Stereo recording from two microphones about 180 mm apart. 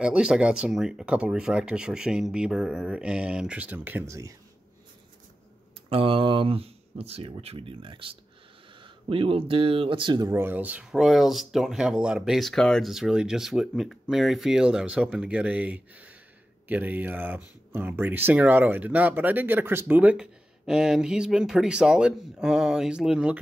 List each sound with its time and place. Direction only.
0.0 s speech: 5° right (ahead or behind)
5.9 s speech: 30° right (ahead or behind); by 23.3 s 5° right (ahead or behind)